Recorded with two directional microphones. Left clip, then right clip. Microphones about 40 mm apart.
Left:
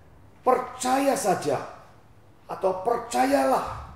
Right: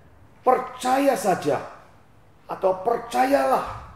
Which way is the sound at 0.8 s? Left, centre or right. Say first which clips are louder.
Right 3 dB; left.